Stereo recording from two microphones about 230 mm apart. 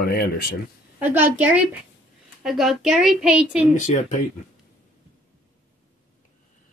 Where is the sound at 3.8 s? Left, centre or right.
Left.